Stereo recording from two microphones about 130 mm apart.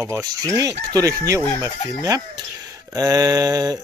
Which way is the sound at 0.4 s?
25° right (ahead or behind).